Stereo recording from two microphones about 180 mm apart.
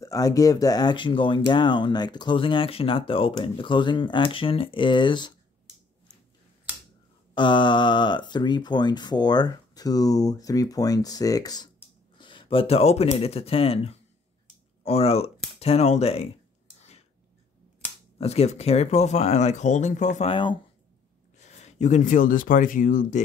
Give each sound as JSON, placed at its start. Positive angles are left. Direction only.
{"t": 0.0, "sound": "speech", "side_deg": 20}
{"t": 7.3, "sound": "speech", "side_deg": 25}
{"t": 18.1, "sound": "speech", "side_deg": 35}
{"t": 21.4, "sound": "speech", "side_deg": 40}